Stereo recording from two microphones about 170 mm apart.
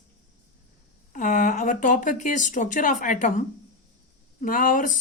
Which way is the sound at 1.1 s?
50° left (ahead or behind).